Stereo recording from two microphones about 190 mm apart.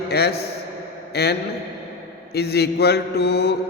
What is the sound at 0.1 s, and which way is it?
A man's voice, 60° left (ahead or behind).